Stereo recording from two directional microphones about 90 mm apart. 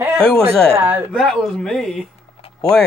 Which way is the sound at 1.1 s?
15° left (ahead or behind).